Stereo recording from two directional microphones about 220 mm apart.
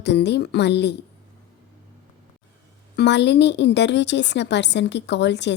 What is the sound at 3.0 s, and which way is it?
A woman's voice, 50° left (ahead or behind).